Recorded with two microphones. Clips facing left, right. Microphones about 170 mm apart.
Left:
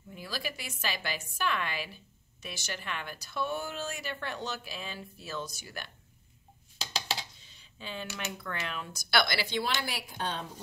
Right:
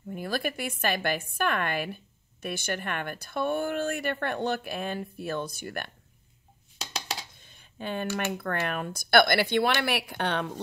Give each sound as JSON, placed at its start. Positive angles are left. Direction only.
{"t": 0.1, "sound": "speech", "side_deg": -55}
{"t": 6.8, "sound": "a sound", "side_deg": 0}
{"t": 7.3, "sound": "speech", "side_deg": -55}